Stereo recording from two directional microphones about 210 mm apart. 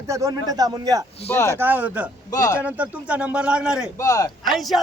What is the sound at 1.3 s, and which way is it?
Speech, 10° left (ahead or behind).